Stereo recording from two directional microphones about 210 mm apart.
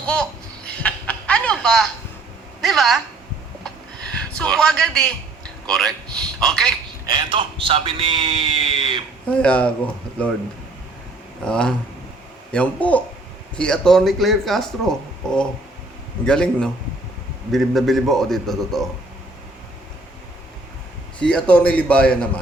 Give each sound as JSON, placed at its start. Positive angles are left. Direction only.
{"t": 0.0, "sound": "a sound", "side_deg": 5}
{"t": 2.6, "sound": "a woman's voice", "side_deg": 0}
{"t": 4.2, "sound": "a man's voice", "side_deg": 5}
{"t": 7.0, "sound": "a man's voice", "side_deg": -20}
{"t": 9.4, "sound": "speech", "side_deg": 5}
{"t": 11.4, "sound": "speech", "side_deg": 5}
{"t": 21.2, "sound": "speech", "side_deg": 5}